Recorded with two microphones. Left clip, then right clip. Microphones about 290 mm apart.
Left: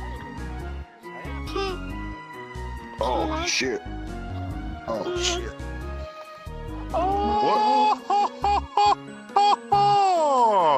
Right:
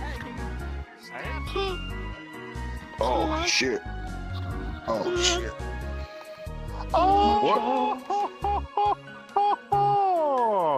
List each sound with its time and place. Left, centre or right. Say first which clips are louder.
1.5 s music: left 2 dB; centre
3.0 s speech: even; centre
4.8 s speech: right 1 dB; centre
6.9 s a child's voice: right 3 dB; right
7.9 s music: left 5 dB; left